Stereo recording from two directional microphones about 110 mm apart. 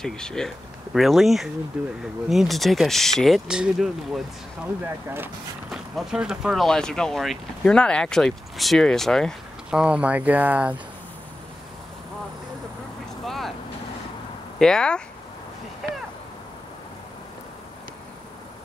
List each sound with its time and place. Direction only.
0.0 s speech: 5° left (ahead or behind)
1.8 s speech: 15° right (ahead or behind)
2.2 s speech: centre (ahead or behind)
4.8 s speech: 20° right (ahead or behind)
5.7 s speech: 5° right (ahead or behind)
9.7 s speech: 10° right (ahead or behind)
13.2 s vehicle: centre (ahead or behind)
14.6 s speech: 5° left (ahead or behind)